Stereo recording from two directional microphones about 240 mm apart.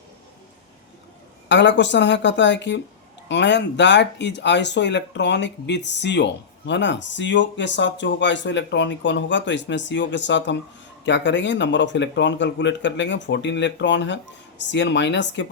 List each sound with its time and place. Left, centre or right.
1.5 s speech: left